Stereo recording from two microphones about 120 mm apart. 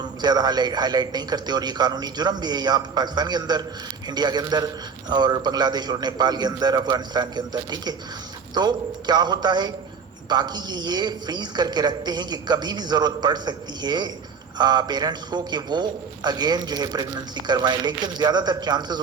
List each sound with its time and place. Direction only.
0.0 s a man's voice: 35° right (ahead or behind)